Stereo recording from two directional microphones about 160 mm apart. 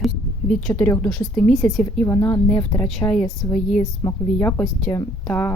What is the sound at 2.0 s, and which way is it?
Speech, 20° left (ahead or behind).